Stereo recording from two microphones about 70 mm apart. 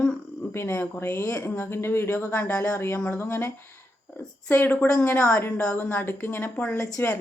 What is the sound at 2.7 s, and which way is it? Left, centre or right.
A woman's voice, left.